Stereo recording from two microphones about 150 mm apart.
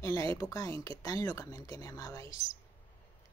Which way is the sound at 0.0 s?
20° left (ahead or behind).